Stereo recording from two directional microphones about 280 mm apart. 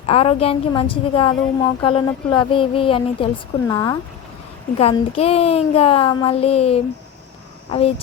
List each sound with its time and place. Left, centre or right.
0.0 s speech: left